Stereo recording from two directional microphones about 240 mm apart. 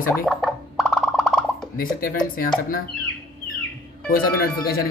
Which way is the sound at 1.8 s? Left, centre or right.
Left.